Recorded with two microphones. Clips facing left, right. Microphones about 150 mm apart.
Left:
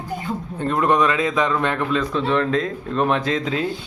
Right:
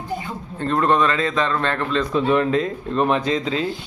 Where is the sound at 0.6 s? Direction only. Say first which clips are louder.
Even; 15° left (ahead or behind).